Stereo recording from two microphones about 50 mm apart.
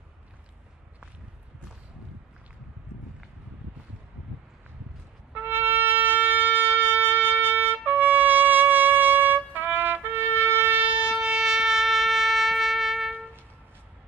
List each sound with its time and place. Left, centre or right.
5.3 s shofar: right
10.8 s shofar: right
11.1 s shofar: centre